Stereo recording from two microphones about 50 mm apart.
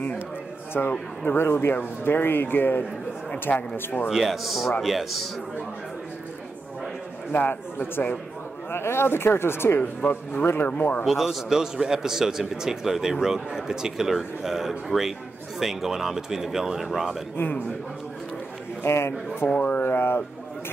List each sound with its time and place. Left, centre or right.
0.7 s speech: left
4.1 s a man's voice: centre
7.3 s speech: left
11.1 s a man's voice: centre
17.4 s speech: left
18.9 s speech: left
19.5 s speech: left
19.8 s a sound: left